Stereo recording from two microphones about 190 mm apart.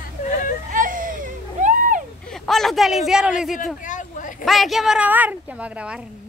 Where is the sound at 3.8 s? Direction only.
40° left (ahead or behind).